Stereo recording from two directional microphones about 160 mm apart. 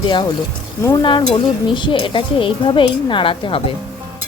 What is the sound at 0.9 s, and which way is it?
Stir, 30° left (ahead or behind).